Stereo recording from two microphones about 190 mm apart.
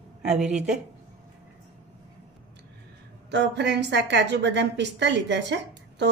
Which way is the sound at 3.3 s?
65° right (ahead or behind).